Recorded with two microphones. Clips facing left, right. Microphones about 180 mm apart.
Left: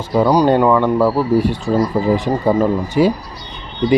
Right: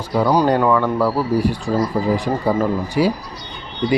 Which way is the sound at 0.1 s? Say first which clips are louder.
Left 3 dB; 25° left (ahead or behind).